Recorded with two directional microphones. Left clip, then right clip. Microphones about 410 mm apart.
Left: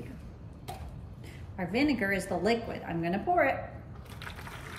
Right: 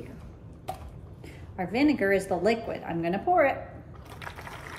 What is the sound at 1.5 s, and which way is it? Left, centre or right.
A woman's voice, centre.